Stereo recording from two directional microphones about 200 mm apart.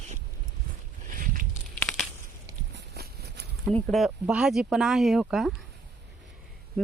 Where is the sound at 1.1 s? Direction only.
45° right (ahead or behind).